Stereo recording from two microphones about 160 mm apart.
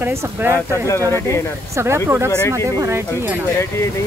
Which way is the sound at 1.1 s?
15° left (ahead or behind).